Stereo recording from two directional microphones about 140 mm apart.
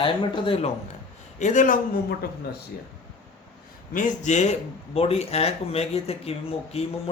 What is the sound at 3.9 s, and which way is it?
Speech, 60° left (ahead or behind).